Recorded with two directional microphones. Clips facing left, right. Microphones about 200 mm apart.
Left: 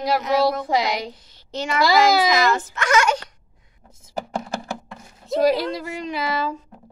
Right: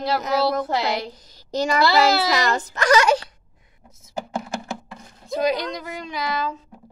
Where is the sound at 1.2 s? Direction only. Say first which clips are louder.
Right 5 dB; 40° right (ahead or behind).